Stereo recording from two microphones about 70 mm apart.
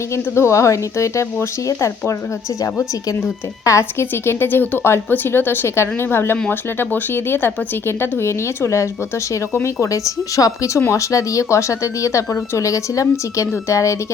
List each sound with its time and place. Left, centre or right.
0.1 s speech: left
3.6 s speech: left
4.1 s speech: left
10.8 s speech: left